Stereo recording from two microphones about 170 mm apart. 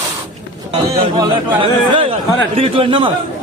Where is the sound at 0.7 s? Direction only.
35° right (ahead or behind).